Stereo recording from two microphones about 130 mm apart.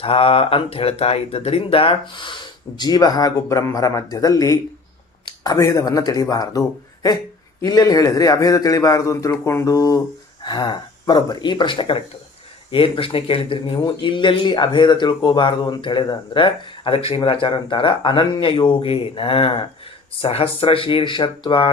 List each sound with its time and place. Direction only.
0.0 s a man's voice: 45° left (ahead or behind)